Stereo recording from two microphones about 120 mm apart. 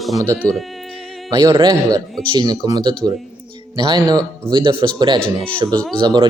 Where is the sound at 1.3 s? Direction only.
40° right (ahead or behind).